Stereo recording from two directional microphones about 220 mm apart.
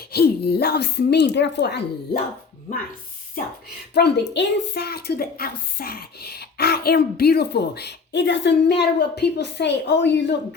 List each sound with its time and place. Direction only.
0.0 s a woman's voice: 45° left (ahead or behind)
3.9 s a woman's voice: 50° left (ahead or behind)